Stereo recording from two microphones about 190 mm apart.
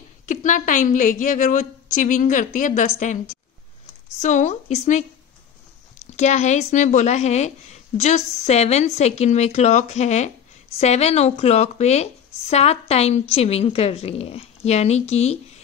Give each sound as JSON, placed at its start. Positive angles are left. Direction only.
{"t": 0.3, "sound": "a woman's voice", "side_deg": 40}
{"t": 4.2, "sound": "a woman's voice", "side_deg": 40}
{"t": 6.0, "sound": "a woman's voice", "side_deg": 35}